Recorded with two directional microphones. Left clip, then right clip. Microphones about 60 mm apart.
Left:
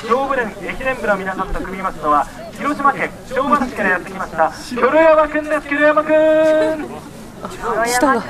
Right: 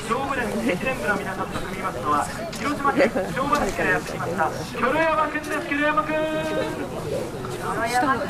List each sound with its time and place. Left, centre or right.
0.1 s a sound: left
1.8 s speech: left
7.8 s speech: left